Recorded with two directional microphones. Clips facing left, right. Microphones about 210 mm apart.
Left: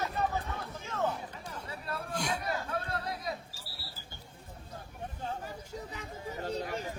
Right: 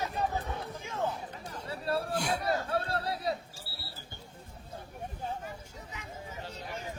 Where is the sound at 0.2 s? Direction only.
15° right (ahead or behind).